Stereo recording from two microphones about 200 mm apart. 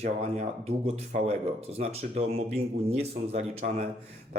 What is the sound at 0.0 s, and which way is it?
Speech, 35° right (ahead or behind).